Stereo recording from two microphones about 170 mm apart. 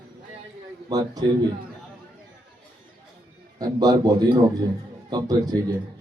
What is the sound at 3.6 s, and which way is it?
A man's voice, 20° right (ahead or behind).